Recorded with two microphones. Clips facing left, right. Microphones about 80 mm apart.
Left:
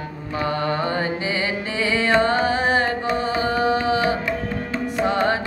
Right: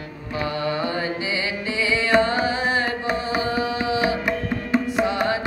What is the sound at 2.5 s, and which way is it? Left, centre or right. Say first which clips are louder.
Carnatic music: left 3 dB; left.